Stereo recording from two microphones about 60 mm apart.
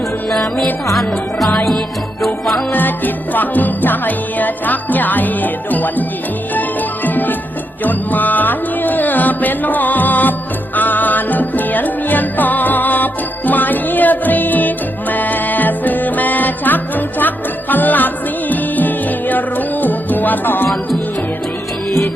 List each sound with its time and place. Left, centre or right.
0.9 s music: centre
2.7 s music: left